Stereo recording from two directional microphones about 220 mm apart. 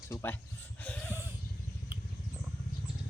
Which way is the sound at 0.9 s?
5° left (ahead or behind).